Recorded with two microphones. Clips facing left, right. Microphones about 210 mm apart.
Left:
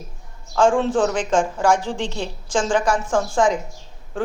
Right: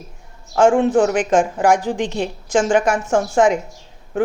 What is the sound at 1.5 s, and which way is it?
A woman's voice, 15° right (ahead or behind).